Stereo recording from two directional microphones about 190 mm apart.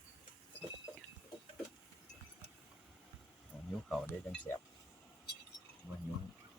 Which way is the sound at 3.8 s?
Centre (ahead or behind).